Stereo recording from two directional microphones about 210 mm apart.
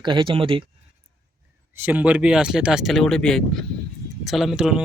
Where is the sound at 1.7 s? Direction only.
10° right (ahead or behind).